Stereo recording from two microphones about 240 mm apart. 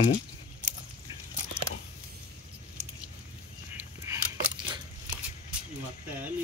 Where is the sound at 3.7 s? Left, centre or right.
Centre.